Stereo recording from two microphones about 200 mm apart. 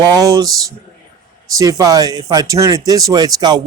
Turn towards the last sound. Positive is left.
turn(degrees=-20)  # may be behind; listen again after turning